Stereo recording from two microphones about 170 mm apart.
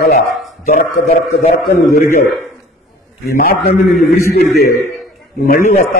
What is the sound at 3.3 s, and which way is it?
A man's voice, 65° left (ahead or behind).